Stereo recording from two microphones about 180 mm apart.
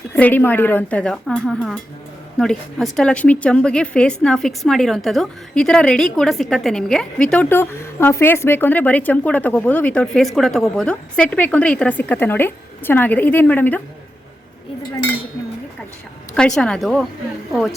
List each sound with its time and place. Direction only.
0.1 s a woman's voice: 10° left (ahead or behind)
16.6 s a woman's voice: centre (ahead or behind)